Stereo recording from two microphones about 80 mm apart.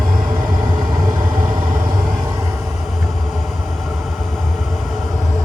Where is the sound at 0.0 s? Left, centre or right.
Centre.